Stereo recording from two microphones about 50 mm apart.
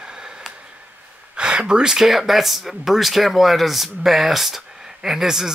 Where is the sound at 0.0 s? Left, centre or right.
Centre.